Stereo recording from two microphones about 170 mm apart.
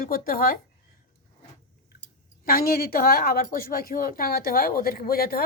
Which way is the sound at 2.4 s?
60° left (ahead or behind).